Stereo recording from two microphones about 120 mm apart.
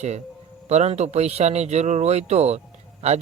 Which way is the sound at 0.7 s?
70° right (ahead or behind).